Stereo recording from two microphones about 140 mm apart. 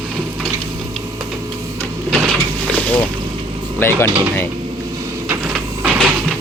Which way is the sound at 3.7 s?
15° left (ahead or behind).